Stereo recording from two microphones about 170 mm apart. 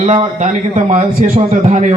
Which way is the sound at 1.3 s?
40° right (ahead or behind).